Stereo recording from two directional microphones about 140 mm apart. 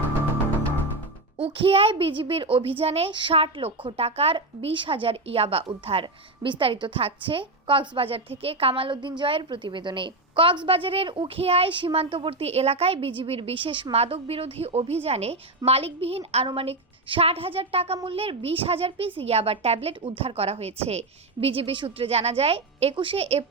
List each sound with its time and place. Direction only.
1.4 s a child's voice: 40° right (ahead or behind)